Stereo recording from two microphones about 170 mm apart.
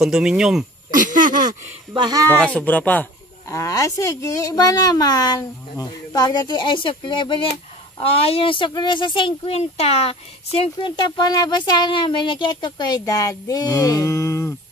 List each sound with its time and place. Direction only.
0.0 s speech: 5° right (ahead or behind)
0.9 s speech: 50° right (ahead or behind)
2.0 s speech: 20° right (ahead or behind)
2.3 s speech: 10° left (ahead or behind)